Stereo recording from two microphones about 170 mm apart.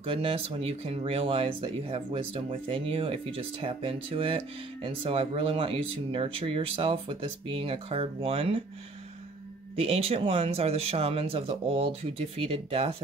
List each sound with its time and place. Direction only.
0.0 s speech: 30° right (ahead or behind)
9.8 s speech: 35° right (ahead or behind)